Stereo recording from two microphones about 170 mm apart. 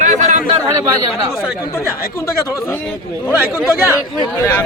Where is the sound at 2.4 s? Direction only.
15° left (ahead or behind).